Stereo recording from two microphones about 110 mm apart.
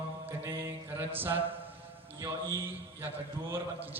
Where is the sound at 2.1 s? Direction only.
30° right (ahead or behind).